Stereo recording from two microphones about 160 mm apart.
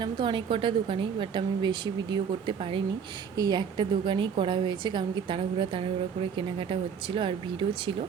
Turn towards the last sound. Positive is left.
turn(degrees=-30)  # may be behind; listen again after turning